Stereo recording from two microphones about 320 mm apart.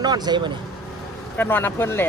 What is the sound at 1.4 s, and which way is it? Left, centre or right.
Speech, centre.